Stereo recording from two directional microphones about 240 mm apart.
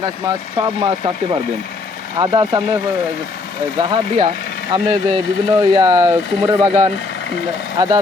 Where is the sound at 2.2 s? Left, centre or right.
Centre.